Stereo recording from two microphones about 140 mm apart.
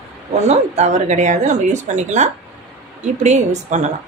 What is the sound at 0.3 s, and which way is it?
Speech, 50° right (ahead or behind).